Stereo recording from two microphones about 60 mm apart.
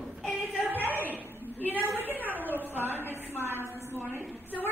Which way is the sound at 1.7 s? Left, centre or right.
Right.